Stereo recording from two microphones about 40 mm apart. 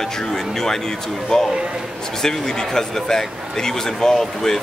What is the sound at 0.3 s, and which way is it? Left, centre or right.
A man's voice, centre.